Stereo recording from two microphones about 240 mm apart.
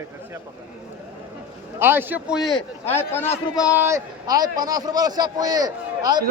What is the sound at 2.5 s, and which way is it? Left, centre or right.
A man's voice, centre.